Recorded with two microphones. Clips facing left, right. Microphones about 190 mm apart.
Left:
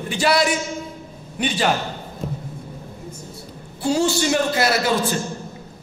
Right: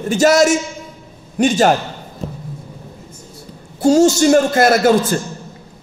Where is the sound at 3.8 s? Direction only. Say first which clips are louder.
Right 9 dB; 45° right (ahead or behind).